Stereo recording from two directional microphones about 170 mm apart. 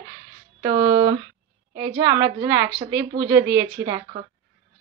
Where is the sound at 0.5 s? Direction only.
20° right (ahead or behind).